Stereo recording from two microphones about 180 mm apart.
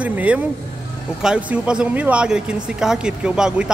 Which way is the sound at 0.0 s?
10° right (ahead or behind).